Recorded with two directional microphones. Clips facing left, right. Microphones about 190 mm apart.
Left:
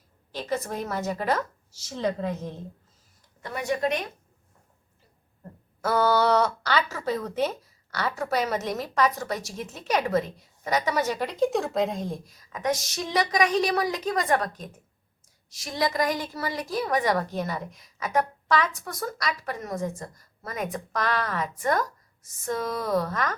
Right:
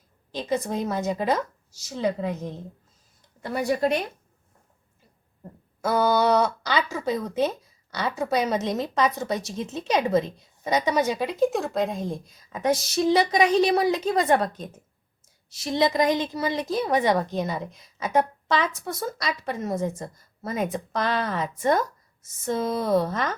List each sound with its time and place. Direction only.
0.3 s speech: 15° right (ahead or behind)
3.4 s speech: 35° right (ahead or behind)
5.4 s speech: 15° right (ahead or behind)
12.5 s a woman's voice: 30° right (ahead or behind)